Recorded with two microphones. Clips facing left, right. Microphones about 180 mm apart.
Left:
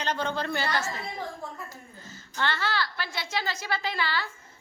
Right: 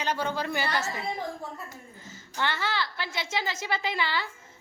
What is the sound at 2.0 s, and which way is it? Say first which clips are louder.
A woman's voice: even; 20° right (ahead or behind).